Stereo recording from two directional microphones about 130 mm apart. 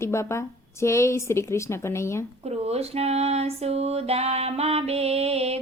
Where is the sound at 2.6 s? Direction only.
55° right (ahead or behind).